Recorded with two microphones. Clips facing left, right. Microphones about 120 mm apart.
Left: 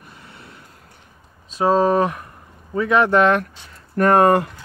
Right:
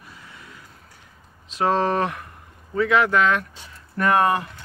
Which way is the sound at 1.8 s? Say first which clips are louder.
Left 5 dB; 15° left (ahead or behind).